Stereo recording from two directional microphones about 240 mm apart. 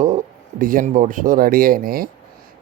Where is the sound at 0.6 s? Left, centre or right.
Right.